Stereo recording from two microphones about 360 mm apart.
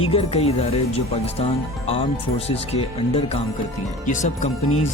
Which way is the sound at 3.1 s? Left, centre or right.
Centre.